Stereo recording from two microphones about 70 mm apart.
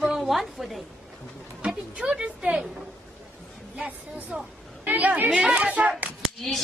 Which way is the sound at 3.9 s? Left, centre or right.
Right.